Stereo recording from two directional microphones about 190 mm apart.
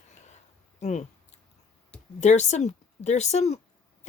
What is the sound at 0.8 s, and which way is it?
Speech, 35° left (ahead or behind).